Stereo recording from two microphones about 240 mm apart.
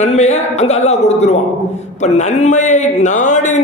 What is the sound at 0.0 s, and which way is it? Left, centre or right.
Speech, left.